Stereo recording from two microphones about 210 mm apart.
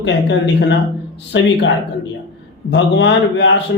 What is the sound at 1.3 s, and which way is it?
Speech, 60° left (ahead or behind).